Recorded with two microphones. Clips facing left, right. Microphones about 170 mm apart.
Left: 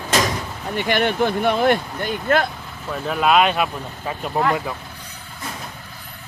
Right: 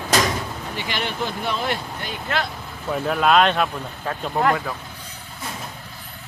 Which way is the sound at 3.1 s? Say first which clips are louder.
Left 1 dB; 5° left (ahead or behind).